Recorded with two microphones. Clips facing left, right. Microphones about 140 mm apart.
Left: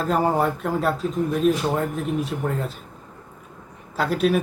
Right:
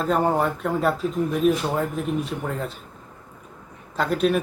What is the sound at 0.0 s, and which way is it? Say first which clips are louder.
Speech: even; centre (ahead or behind).